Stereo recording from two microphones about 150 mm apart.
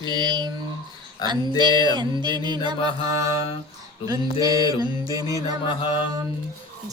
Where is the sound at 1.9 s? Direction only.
30° right (ahead or behind).